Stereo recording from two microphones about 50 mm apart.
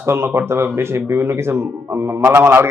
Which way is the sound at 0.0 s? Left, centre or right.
Right.